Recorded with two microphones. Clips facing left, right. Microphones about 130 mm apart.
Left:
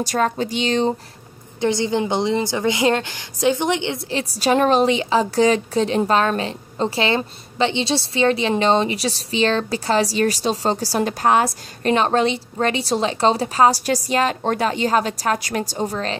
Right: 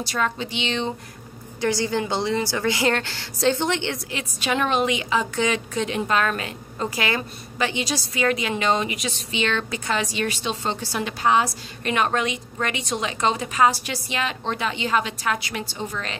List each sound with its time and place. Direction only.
0.0 s a woman's voice: 45° left (ahead or behind)
1.6 s a woman's voice: 20° left (ahead or behind)
4.1 s a woman's voice: 35° left (ahead or behind)
11.8 s a woman's voice: 30° left (ahead or behind)